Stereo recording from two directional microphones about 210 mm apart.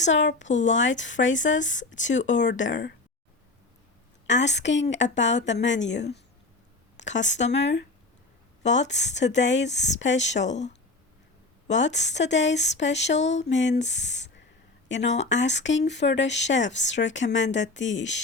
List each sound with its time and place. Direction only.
0.1 s speech: 60° left (ahead or behind)
4.3 s speech: 55° left (ahead or behind)
11.7 s speech: 60° left (ahead or behind)
13.2 s a sound: 30° left (ahead or behind)
13.5 s speech: 60° left (ahead or behind)